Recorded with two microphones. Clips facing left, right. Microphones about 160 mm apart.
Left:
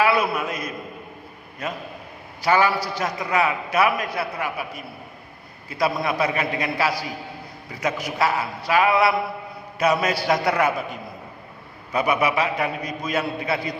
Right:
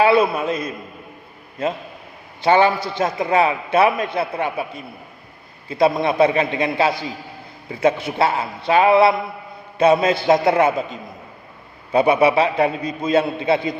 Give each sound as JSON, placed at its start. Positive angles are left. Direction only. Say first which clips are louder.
{"t": 0.0, "sound": "a man's voice", "louder": "right 5 dB", "side_deg": -25}